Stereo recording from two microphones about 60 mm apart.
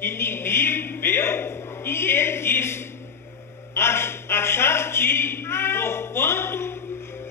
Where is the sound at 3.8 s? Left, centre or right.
Left.